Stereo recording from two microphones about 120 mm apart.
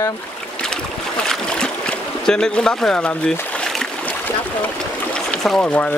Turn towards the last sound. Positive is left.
turn(degrees=10)  # may be behind; listen again after turning